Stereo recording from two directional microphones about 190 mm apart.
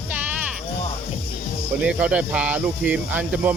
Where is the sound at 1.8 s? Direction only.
5° right (ahead or behind).